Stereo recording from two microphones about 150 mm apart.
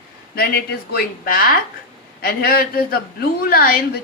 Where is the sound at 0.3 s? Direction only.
90° left.